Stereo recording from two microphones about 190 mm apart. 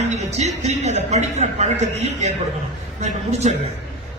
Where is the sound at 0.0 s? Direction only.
35° right (ahead or behind).